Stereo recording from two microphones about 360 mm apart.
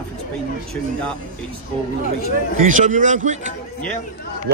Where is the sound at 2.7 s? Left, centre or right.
Right.